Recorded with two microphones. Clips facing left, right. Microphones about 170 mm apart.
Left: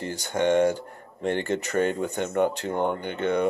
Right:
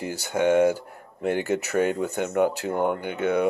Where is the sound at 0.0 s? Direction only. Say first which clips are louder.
Right 1 dB; 10° right (ahead or behind).